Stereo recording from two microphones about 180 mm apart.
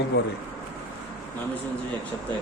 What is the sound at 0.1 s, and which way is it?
Speech, 65° left (ahead or behind).